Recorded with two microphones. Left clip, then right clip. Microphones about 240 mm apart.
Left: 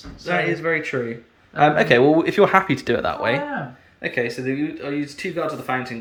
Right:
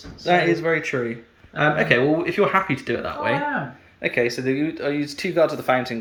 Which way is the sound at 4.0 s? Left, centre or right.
Centre.